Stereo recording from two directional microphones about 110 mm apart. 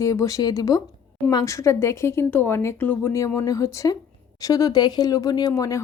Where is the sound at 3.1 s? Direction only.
30° left (ahead or behind).